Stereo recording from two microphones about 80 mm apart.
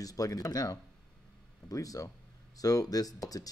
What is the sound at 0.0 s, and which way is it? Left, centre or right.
Speech, left.